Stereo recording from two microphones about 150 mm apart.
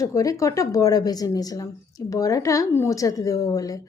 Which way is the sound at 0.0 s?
20° left (ahead or behind).